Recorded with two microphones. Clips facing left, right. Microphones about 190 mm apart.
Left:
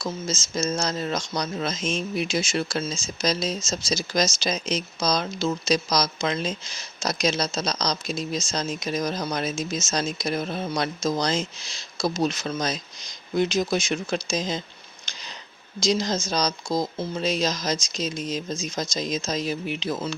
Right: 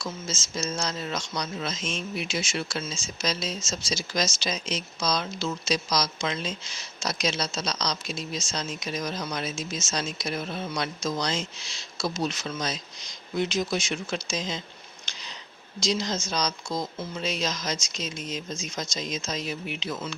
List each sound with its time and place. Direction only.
0.0 s speech: 40° left (ahead or behind)
15.1 s a sound: 40° left (ahead or behind)
15.8 s speech: 40° left (ahead or behind)